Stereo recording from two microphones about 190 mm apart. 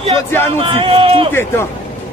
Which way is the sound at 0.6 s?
25° right (ahead or behind).